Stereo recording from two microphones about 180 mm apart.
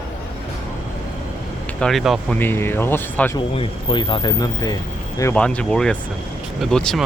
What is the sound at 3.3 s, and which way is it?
Speech, 30° left (ahead or behind).